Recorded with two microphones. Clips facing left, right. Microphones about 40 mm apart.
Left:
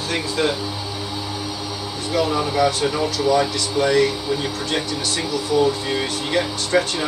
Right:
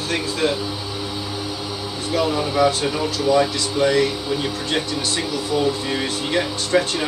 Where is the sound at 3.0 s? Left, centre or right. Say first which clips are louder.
Right 1 dB; right.